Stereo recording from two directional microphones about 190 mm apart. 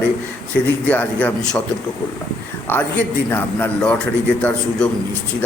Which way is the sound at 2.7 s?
10° left (ahead or behind).